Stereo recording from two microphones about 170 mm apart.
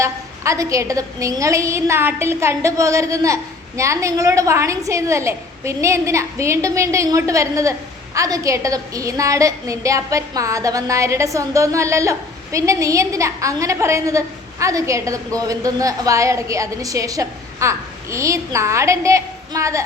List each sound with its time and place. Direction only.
0.0 s a woman's voice: 20° right (ahead or behind)